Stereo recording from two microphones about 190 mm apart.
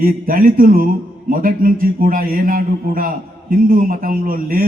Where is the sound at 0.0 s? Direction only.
50° right (ahead or behind).